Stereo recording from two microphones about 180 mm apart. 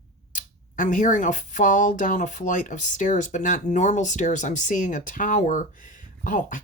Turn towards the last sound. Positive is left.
turn(degrees=45)  # may be behind; listen again after turning